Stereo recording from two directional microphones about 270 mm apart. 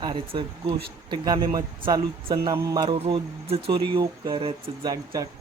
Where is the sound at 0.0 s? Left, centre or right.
Centre.